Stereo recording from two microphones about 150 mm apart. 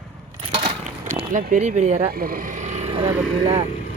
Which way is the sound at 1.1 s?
55° right (ahead or behind).